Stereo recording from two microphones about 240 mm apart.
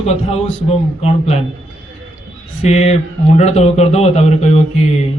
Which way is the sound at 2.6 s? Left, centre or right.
Left.